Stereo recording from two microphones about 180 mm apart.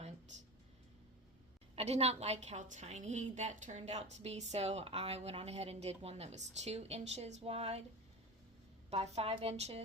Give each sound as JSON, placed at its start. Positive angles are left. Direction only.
{"t": 1.7, "sound": "a woman's voice", "side_deg": -35}
{"t": 8.9, "sound": "a woman's voice", "side_deg": -35}